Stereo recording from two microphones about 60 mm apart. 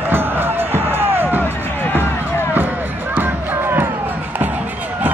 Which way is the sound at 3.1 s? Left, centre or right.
Right.